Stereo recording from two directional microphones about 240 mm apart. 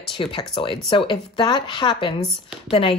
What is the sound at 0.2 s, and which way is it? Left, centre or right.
Speech, left.